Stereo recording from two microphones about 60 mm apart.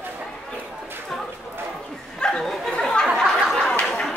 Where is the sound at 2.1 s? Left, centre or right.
Centre.